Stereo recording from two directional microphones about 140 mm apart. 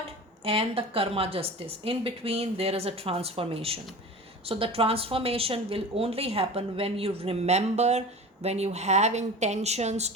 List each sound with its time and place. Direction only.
0.4 s a woman's voice: 40° right (ahead or behind)